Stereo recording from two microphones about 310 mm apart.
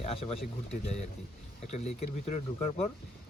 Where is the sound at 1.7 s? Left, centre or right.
Left.